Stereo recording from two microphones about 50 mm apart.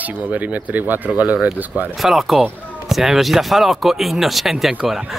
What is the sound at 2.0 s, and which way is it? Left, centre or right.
Speech, centre.